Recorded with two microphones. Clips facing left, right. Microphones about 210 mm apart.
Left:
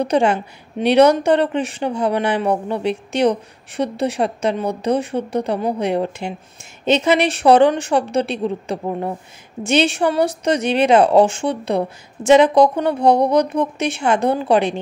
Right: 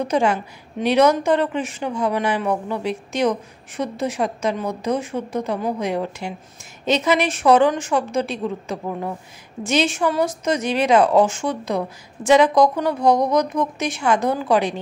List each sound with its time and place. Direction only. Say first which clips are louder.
0.0 s a woman's voice: left 3 dB; 30° left (ahead or behind)